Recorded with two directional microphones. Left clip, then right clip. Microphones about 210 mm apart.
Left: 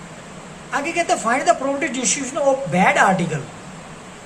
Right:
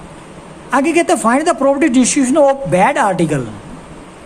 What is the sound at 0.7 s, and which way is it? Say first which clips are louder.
A woman's voice: right 7 dB; 55° right (ahead or behind).